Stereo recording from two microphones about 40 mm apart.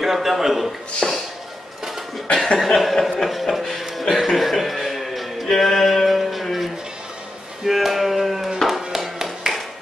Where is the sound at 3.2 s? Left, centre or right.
Centre.